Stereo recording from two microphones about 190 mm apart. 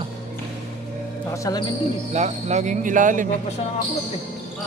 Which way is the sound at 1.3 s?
15° left (ahead or behind).